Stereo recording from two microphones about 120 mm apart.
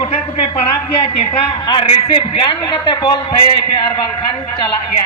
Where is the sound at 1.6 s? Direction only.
45° left (ahead or behind).